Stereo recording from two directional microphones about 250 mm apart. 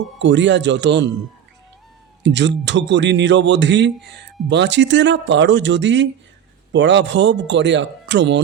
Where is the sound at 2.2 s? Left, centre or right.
Right.